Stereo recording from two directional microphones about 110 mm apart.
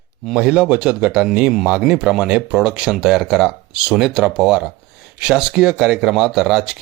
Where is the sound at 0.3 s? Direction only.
5° right (ahead or behind).